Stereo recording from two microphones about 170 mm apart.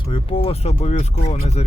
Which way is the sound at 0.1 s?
35° left (ahead or behind).